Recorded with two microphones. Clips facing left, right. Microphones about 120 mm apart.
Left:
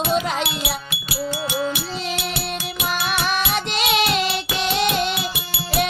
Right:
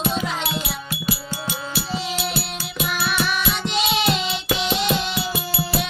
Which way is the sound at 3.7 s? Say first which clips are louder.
Left 1 dB; 60° left (ahead or behind).